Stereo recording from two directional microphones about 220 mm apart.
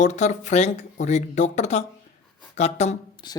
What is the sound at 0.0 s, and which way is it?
Speech, 30° left (ahead or behind).